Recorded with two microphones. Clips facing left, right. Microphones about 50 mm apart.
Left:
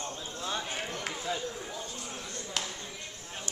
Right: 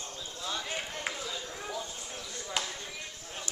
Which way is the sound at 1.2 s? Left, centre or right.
Left.